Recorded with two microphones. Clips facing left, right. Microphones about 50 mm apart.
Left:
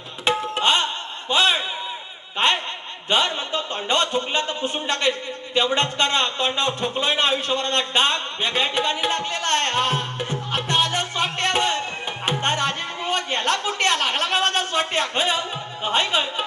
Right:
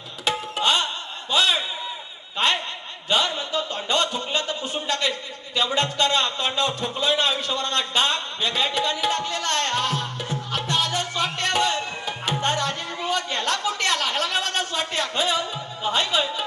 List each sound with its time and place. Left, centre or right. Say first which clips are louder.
0.3 s tabla: left 3 dB; left
1.3 s a sound: left 2 dB; left
3.1 s a man's voice: left 1 dB; left